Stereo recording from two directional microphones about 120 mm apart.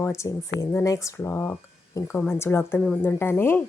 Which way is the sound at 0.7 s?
25° left (ahead or behind).